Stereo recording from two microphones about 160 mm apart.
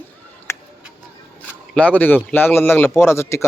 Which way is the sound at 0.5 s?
15° left (ahead or behind).